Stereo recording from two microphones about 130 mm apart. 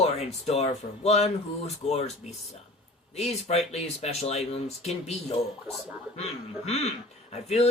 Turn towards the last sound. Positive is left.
turn(degrees=55)  # may be behind; listen again after turning